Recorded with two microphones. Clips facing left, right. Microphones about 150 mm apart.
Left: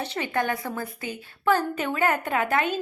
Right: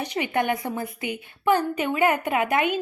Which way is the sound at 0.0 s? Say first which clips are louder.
Right 2 dB; 15° right (ahead or behind).